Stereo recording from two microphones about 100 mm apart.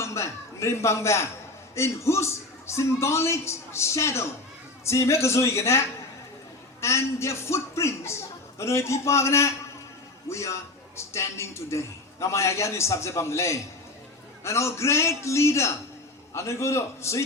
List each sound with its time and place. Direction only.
0.0 s a man's voice: 30° left (ahead or behind)
6.8 s a man's voice: 30° left (ahead or behind)